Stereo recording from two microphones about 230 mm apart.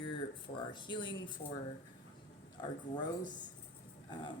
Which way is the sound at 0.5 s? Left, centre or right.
Centre.